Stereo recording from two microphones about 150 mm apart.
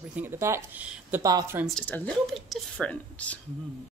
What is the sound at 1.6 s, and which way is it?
Speech, 5° left (ahead or behind).